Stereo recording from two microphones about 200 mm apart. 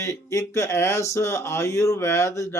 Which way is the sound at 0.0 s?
15° left (ahead or behind).